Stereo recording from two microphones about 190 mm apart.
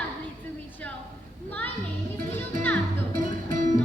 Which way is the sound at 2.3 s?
10° left (ahead or behind).